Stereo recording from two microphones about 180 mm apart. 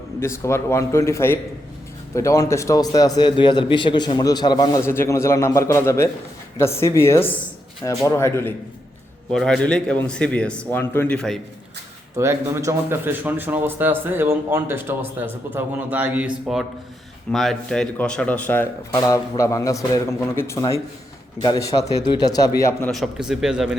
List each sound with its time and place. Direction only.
0.2 s a man's voice: 15° left (ahead or behind)
9.3 s a man's voice: 5° left (ahead or behind)
12.1 s a man's voice: 15° right (ahead or behind); by 22.9 s 15° left (ahead or behind)
22.9 s a man's voice: centre (ahead or behind)